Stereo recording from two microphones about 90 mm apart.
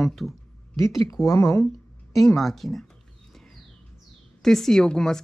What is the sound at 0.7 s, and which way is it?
Speech, 30° left (ahead or behind).